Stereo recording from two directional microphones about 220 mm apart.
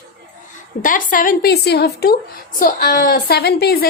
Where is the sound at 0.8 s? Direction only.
35° left (ahead or behind).